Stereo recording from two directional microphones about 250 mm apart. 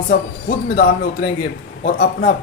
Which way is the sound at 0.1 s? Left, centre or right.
Left.